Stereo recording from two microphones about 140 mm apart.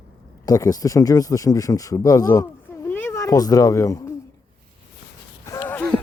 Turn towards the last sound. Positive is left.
turn(degrees=15)  # may be behind; listen again after turning